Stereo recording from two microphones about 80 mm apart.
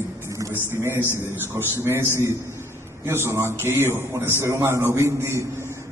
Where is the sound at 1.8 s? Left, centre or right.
Right.